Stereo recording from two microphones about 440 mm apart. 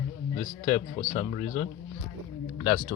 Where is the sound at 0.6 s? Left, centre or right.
Centre.